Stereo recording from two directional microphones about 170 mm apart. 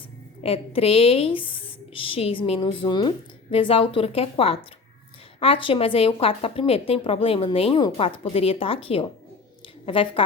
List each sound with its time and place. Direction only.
0.4 s a woman's voice: 35° left (ahead or behind)